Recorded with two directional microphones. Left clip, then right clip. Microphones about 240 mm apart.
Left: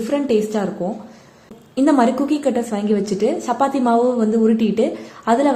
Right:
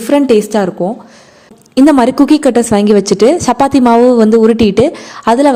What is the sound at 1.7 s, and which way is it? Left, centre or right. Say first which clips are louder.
A woman's voice: right 8 dB; right.